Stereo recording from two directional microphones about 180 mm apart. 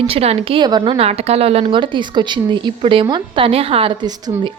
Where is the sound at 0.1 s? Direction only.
35° right (ahead or behind).